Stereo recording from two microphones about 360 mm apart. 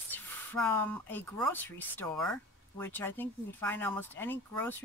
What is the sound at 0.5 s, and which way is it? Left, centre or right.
Speech, centre.